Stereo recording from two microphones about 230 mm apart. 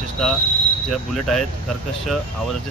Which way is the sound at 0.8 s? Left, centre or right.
Centre.